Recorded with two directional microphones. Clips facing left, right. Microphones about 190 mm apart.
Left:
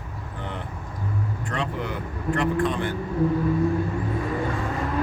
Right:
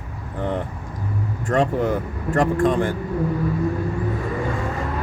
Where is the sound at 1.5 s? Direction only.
45° right (ahead or behind).